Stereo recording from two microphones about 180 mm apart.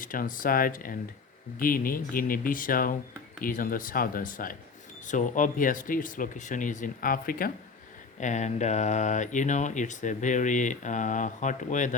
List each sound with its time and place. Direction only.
0.0 s speech: 50° left (ahead or behind)
8.2 s speech: 40° left (ahead or behind)